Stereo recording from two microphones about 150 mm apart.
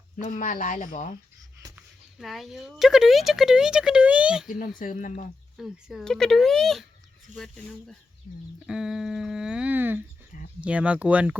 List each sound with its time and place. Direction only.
0.3 s speech: 65° left (ahead or behind)
1.7 s speech: centre (ahead or behind)
4.8 s speech: 60° left (ahead or behind)
5.5 s speech: centre (ahead or behind)
8.6 s a sound: 5° right (ahead or behind)
10.6 s speech: 10° right (ahead or behind)